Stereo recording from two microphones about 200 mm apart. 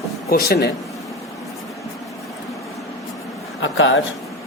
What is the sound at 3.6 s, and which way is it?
Speech, 70° left (ahead or behind).